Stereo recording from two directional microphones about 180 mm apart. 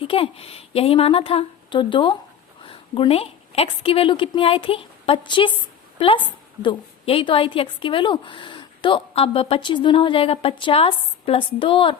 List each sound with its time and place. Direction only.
0.0 s a woman's voice: 30° left (ahead or behind)